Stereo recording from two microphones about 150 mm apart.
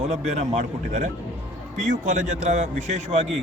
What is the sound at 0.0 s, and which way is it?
A man's voice, 45° right (ahead or behind).